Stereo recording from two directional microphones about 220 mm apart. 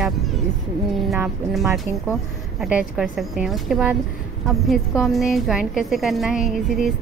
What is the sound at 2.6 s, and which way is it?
A woman's voice, 5° right (ahead or behind).